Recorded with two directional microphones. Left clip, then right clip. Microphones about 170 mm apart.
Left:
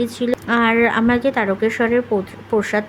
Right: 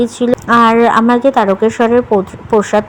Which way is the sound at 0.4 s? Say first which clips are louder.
Right 8 dB; 20° right (ahead or behind).